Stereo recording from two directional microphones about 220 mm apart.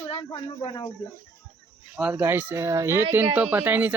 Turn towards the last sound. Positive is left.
turn(degrees=-10)  # may be behind; listen again after turning